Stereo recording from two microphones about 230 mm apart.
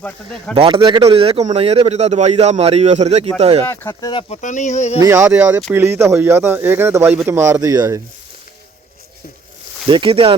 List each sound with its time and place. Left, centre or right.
0.5 s a man's voice: right
3.7 s speech: centre
4.9 s speech: centre
9.9 s a man's voice: right